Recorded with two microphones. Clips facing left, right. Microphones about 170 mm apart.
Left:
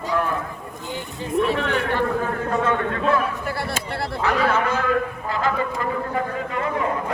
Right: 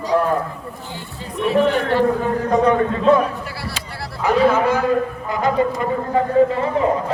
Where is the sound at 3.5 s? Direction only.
55° left (ahead or behind).